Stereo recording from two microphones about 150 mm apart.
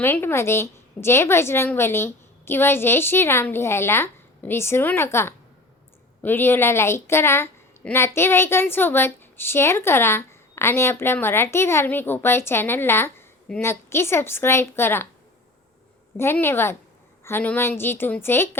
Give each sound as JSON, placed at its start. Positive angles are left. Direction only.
{"t": 0.0, "sound": "a woman's voice", "side_deg": 15}
{"t": 16.1, "sound": "a woman's voice", "side_deg": 15}